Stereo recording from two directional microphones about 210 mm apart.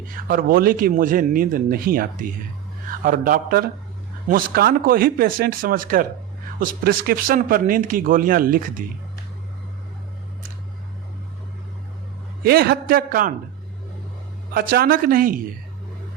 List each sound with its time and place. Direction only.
0.3 s speech: 45° right (ahead or behind)
12.4 s speech: 45° right (ahead or behind)
14.5 s speech: 45° right (ahead or behind)